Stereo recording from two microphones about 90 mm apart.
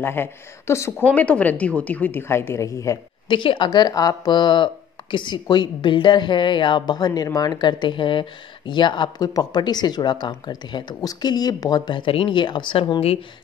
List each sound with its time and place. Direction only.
0.0 s a woman's voice: 25° left (ahead or behind)
1.0 s a woman's voice: 15° left (ahead or behind); by 3.0 s 35° left (ahead or behind)
3.3 s speech: 65° left (ahead or behind)